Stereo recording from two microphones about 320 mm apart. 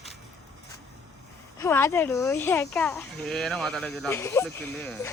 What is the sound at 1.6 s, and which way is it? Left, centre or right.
Speech, centre.